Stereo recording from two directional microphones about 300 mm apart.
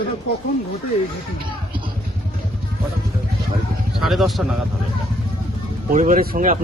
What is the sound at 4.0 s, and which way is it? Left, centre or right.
Speech, centre.